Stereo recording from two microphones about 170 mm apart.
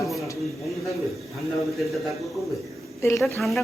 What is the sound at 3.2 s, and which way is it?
Speech, centre (ahead or behind).